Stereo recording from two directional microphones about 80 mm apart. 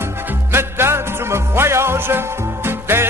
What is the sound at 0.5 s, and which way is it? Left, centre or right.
Music, right.